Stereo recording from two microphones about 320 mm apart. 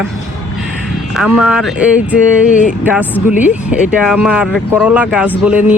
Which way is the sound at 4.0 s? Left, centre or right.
Centre.